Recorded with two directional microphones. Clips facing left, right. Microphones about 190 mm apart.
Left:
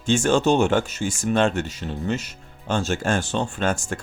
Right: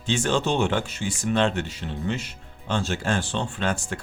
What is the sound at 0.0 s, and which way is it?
Speech, 45° left (ahead or behind).